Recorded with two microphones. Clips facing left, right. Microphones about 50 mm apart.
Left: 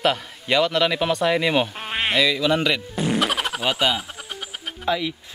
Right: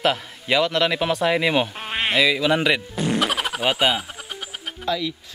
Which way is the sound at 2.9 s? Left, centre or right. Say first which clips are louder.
Even; centre.